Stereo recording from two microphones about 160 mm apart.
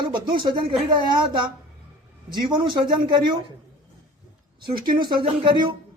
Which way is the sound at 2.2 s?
30° right (ahead or behind).